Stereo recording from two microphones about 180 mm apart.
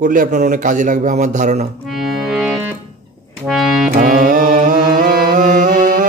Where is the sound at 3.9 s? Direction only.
50° right (ahead or behind).